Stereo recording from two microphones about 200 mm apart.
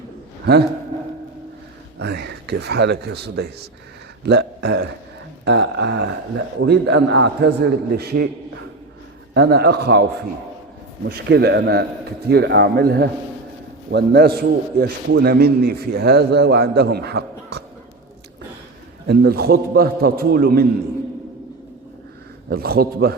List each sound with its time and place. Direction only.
2.0 s a man's voice: 55° right (ahead or behind)
9.3 s a man's voice: 55° right (ahead or behind)
11.1 s a man's voice: 55° right (ahead or behind)
19.0 s a man's voice: 50° right (ahead or behind)
22.4 s a man's voice: 50° right (ahead or behind)